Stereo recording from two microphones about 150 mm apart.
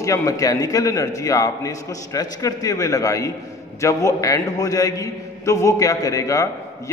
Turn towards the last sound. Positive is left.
turn(degrees=20)  # may be behind; listen again after turning